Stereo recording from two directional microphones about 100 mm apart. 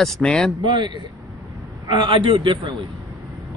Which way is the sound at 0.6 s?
50° right (ahead or behind).